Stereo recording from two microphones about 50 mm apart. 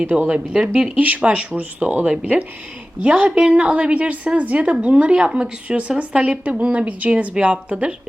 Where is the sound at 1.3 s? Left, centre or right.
Right.